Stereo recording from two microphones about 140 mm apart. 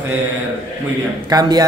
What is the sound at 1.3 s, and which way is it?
Speech, 30° right (ahead or behind).